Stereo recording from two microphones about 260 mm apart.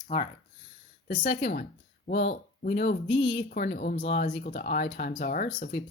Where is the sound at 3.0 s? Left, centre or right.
Left.